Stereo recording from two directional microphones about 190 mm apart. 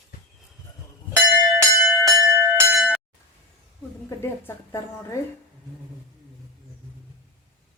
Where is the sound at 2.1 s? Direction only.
15° right (ahead or behind).